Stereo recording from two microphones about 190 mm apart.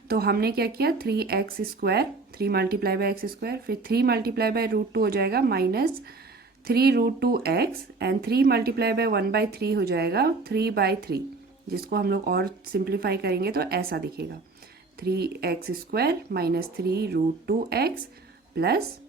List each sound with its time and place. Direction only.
0.1 s speech: 55° right (ahead or behind)